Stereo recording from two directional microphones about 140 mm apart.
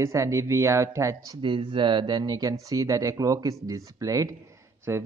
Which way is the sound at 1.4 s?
35° right (ahead or behind).